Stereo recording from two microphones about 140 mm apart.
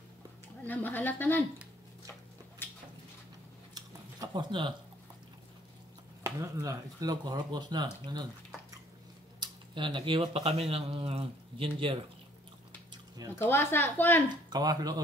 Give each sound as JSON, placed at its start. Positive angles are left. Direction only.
{"t": 0.7, "sound": "a woman's voice", "side_deg": 15}
{"t": 2.6, "sound": "a sound", "side_deg": 15}
{"t": 3.7, "sound": "a sound", "side_deg": -30}
{"t": 6.2, "sound": "speech", "side_deg": -20}
{"t": 9.4, "sound": "speech", "side_deg": -35}
{"t": 13.4, "sound": "a woman's voice", "side_deg": 15}
{"t": 14.3, "sound": "speech", "side_deg": -30}